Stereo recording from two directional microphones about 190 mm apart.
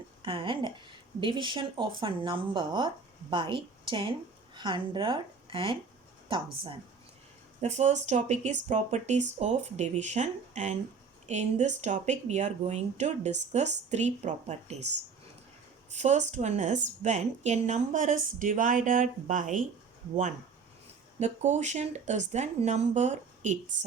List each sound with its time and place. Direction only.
0.2 s speech: 25° right (ahead or behind)
7.6 s speech: 40° right (ahead or behind)
15.9 s speech: 40° right (ahead or behind)
21.2 s speech: 40° right (ahead or behind)